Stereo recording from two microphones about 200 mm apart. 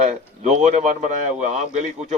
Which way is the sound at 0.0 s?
35° right (ahead or behind).